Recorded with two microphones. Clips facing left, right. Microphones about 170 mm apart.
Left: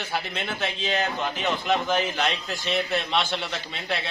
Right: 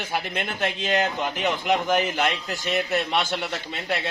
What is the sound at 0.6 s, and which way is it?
Speech, 50° right (ahead or behind).